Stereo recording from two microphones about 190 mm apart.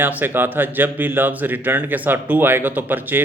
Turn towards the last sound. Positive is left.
turn(degrees=-10)  # may be behind; listen again after turning